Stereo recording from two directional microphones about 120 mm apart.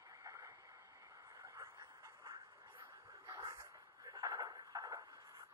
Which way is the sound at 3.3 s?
30° right (ahead or behind).